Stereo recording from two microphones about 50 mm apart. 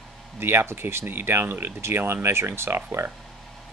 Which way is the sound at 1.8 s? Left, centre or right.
Right.